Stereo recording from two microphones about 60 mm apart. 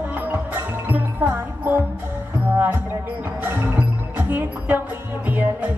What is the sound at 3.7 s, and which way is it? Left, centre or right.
Music, right.